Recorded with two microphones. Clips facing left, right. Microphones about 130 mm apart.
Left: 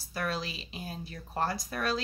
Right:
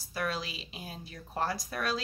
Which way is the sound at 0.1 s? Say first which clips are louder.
Left 1 dB; 5° right (ahead or behind).